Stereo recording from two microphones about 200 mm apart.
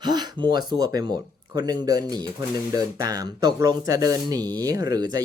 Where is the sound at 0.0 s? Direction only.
20° right (ahead or behind).